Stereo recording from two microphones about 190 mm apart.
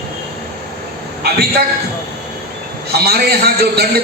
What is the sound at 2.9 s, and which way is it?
A man's voice, 55° right (ahead or behind).